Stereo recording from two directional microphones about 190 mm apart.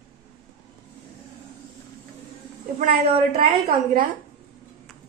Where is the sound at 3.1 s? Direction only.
30° right (ahead or behind).